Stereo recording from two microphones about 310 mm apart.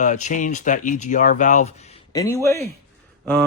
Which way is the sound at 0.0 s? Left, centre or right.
Left.